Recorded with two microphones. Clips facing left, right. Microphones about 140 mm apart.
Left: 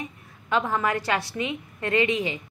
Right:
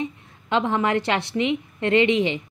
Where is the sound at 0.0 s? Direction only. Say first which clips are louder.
Right 8 dB; 25° right (ahead or behind).